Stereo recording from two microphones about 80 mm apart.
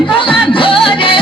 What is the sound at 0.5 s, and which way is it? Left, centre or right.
Music, left.